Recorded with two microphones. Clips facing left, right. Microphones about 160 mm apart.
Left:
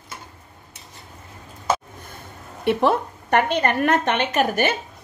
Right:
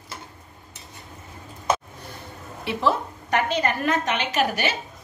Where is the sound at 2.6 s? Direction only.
55° left (ahead or behind).